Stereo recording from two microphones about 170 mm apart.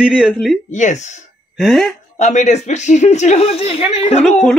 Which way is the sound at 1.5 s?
Centre (ahead or behind).